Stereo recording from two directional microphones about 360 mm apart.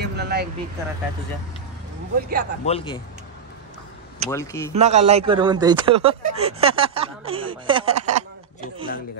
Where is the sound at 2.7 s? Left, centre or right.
Centre.